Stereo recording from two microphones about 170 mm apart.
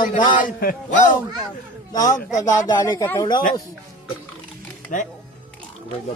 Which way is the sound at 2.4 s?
20° left (ahead or behind).